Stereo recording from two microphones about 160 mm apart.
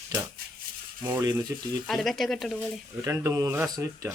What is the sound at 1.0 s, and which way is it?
Speech, 15° right (ahead or behind).